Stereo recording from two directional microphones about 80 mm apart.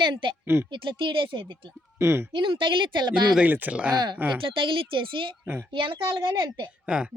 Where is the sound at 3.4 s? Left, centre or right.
Centre.